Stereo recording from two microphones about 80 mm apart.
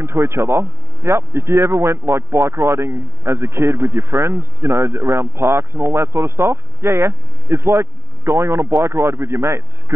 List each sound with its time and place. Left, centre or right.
0.0 s speech: right